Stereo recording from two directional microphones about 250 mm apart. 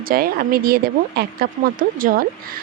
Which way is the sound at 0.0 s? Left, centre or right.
Right.